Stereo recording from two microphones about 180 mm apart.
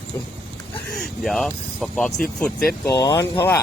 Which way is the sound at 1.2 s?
Centre (ahead or behind).